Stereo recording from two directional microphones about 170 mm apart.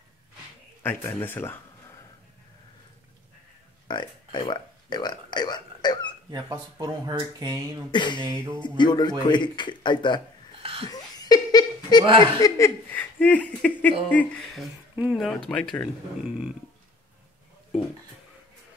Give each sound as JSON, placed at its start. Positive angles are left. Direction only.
{"t": 0.8, "sound": "speech", "side_deg": 15}
{"t": 3.8, "sound": "a sound", "side_deg": 25}
{"t": 6.3, "sound": "speech", "side_deg": -25}
{"t": 7.9, "sound": "speech", "side_deg": 25}
{"t": 8.3, "sound": "music", "side_deg": -15}
{"t": 8.5, "sound": "speech", "side_deg": 25}
{"t": 10.9, "sound": "laughter", "side_deg": 25}
{"t": 12.0, "sound": "speech", "side_deg": -30}
{"t": 12.4, "sound": "speech", "side_deg": 20}
{"t": 15.0, "sound": "speech", "side_deg": -5}